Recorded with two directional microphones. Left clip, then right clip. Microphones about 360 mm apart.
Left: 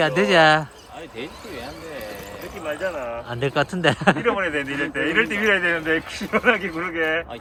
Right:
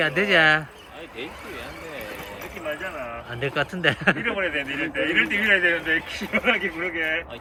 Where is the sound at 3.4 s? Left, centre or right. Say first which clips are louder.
Left 2 dB; centre.